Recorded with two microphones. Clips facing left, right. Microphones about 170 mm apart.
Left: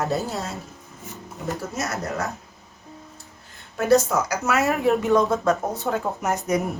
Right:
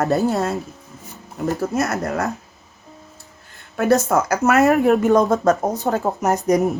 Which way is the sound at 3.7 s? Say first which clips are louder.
Right 2 dB; 60° right (ahead or behind).